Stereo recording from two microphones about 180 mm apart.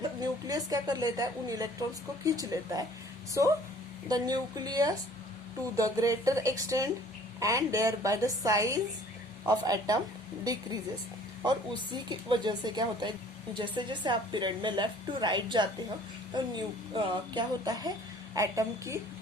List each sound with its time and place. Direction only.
0.2 s a woman's voice: 20° right (ahead or behind)
11.4 s a woman's voice: 25° right (ahead or behind)